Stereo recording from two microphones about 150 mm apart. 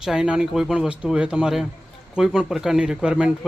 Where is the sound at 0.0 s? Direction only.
5° right (ahead or behind).